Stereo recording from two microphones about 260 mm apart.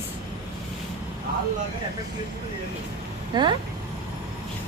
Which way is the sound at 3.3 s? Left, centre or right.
Centre.